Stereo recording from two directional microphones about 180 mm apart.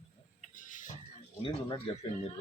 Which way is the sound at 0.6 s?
45° left (ahead or behind).